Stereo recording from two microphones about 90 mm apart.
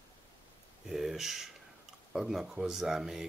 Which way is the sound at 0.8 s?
5° right (ahead or behind).